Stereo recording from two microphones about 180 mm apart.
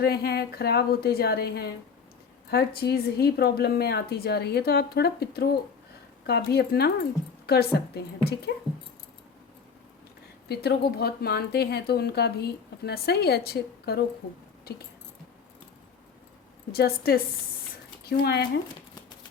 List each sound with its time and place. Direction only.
0.0 s speech: 60° left (ahead or behind)
10.5 s speech: 65° left (ahead or behind)
16.7 s speech: 60° left (ahead or behind)